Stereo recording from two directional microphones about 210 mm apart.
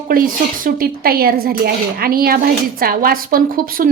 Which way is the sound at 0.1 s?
45° right (ahead or behind).